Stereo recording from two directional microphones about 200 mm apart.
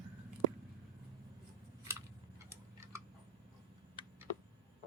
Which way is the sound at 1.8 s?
15° right (ahead or behind).